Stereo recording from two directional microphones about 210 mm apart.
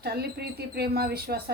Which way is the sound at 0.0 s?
50° right (ahead or behind).